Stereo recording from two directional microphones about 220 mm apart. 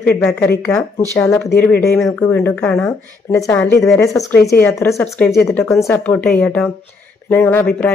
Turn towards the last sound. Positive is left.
turn(degrees=10)  # may be behind; listen again after turning